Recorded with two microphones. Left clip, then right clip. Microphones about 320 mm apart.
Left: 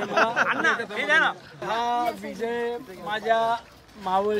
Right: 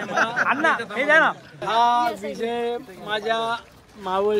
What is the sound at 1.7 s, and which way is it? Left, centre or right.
Speech, centre.